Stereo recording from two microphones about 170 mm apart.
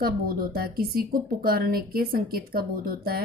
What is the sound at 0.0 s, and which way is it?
A woman's voice, 60° right (ahead or behind).